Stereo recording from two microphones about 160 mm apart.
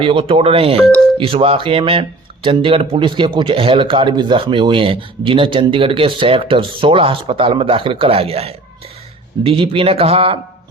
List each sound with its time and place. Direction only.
0.0 s speech: 35° right (ahead or behind)
0.8 s speech: 5° left (ahead or behind)
1.2 s speech: 35° right (ahead or behind)